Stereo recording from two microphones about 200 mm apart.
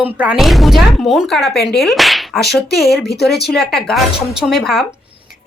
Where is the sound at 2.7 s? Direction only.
55° left (ahead or behind).